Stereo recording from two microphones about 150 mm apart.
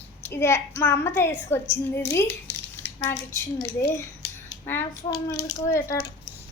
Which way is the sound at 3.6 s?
20° left (ahead or behind).